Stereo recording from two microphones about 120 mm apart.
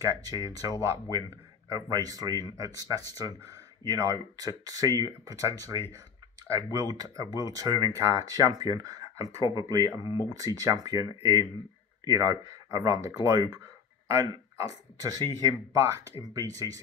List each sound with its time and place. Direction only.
0.0 s speech: 30° right (ahead or behind)